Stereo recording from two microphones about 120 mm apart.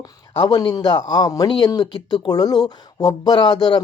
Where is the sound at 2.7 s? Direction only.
30° left (ahead or behind).